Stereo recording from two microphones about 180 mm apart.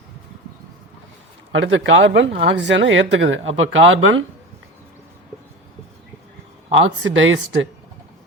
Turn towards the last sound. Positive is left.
turn(degrees=-90)